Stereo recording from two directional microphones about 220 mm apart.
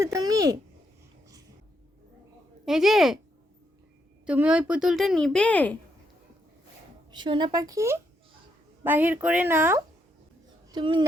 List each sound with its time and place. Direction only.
0.0 s speech: 15° right (ahead or behind)
2.6 s a woman's voice: centre (ahead or behind)
4.3 s a woman's voice: 5° right (ahead or behind)
7.1 s speech: 20° right (ahead or behind)
10.7 s speech: 20° right (ahead or behind)